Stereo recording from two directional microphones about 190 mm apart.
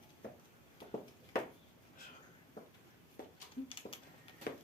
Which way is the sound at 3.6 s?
25° left (ahead or behind).